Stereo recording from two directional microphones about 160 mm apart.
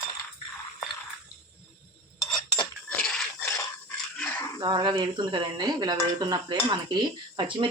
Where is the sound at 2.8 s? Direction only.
10° left (ahead or behind).